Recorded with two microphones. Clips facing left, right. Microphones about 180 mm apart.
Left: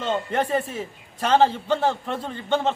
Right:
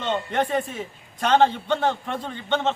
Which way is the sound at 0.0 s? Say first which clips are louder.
Even; 5° left (ahead or behind).